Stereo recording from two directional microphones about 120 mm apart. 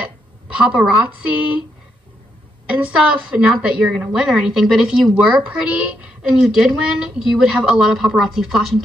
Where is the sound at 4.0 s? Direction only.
5° right (ahead or behind).